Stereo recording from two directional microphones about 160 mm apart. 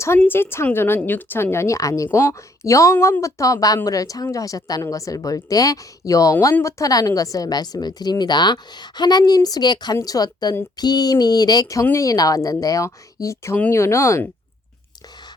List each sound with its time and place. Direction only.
0.0 s a woman's voice: 15° left (ahead or behind)